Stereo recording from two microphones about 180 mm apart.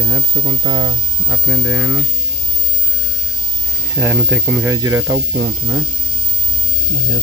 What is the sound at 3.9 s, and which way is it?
Speech, 10° right (ahead or behind).